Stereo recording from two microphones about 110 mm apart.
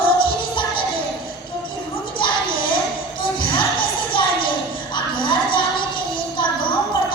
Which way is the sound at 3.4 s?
50° left (ahead or behind).